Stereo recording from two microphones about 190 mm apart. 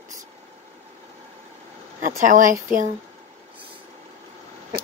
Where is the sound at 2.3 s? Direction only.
45° right (ahead or behind).